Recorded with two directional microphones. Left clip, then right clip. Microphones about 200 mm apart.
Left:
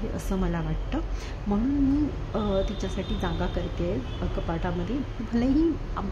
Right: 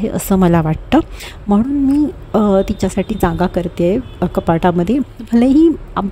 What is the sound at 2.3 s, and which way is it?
A woman's voice, 50° right (ahead or behind).